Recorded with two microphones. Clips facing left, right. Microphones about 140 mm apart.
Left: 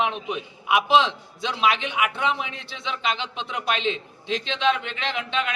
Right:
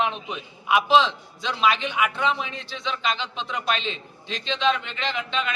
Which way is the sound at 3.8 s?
70° left (ahead or behind).